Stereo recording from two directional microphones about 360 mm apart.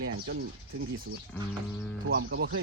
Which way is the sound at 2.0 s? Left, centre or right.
Right.